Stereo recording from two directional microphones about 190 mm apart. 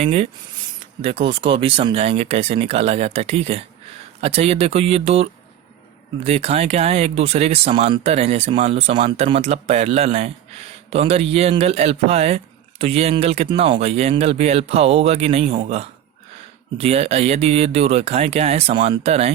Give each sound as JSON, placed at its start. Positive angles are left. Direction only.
{"t": 0.0, "sound": "speech", "side_deg": -35}